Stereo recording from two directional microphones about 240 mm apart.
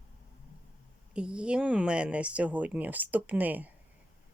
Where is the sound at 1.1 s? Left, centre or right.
Centre.